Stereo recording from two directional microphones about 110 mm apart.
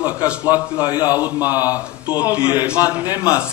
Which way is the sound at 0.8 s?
40° left (ahead or behind).